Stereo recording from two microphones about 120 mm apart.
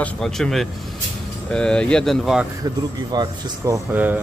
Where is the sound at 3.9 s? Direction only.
15° right (ahead or behind).